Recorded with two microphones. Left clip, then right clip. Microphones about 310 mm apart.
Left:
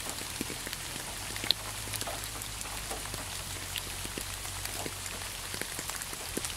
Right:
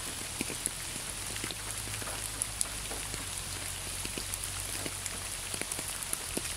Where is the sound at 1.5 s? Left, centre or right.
Left.